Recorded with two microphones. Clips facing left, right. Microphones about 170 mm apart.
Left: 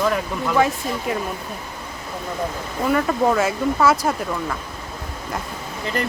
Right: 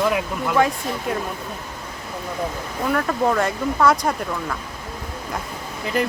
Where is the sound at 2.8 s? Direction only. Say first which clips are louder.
Left 2 dB; 5° left (ahead or behind).